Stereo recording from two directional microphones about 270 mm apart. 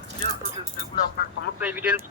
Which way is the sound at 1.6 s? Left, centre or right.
Centre.